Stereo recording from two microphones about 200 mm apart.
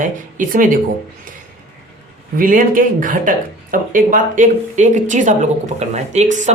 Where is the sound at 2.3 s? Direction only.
45° right (ahead or behind).